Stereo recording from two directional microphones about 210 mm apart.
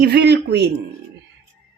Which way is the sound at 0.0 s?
50° right (ahead or behind).